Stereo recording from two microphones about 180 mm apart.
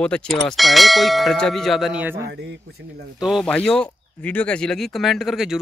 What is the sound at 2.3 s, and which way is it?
Speech, 75° right (ahead or behind).